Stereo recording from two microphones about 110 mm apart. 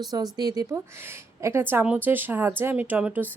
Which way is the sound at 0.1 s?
40° right (ahead or behind).